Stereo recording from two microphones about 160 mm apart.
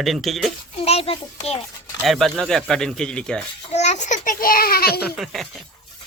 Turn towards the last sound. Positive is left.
turn(degrees=0)  # may be behind; listen again after turning